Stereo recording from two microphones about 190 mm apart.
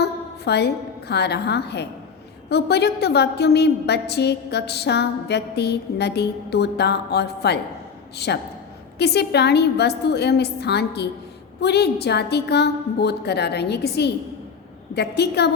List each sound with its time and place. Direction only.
0.0 s a woman's voice: 60° left (ahead or behind)